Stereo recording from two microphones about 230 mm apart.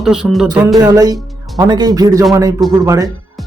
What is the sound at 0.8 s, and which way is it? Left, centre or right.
Speech, centre.